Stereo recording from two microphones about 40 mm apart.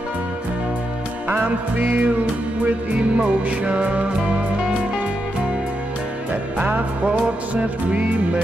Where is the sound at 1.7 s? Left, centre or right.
Right.